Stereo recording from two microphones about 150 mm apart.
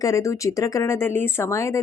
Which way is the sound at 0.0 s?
20° left (ahead or behind).